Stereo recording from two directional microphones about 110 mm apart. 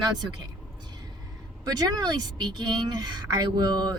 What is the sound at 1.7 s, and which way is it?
Speech, 35° right (ahead or behind).